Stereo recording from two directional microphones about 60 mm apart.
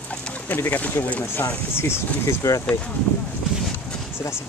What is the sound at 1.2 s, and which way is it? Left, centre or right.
Speech, left.